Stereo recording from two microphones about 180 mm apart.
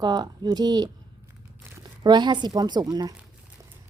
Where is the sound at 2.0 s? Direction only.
25° right (ahead or behind).